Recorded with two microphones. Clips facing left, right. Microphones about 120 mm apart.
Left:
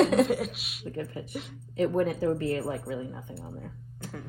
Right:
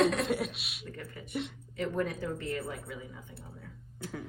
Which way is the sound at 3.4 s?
60° left (ahead or behind).